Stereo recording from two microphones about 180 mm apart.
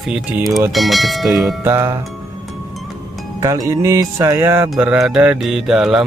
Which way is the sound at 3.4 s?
20° right (ahead or behind).